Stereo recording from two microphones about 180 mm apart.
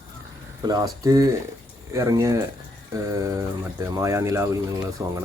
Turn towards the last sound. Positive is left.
turn(degrees=-20)  # may be behind; listen again after turning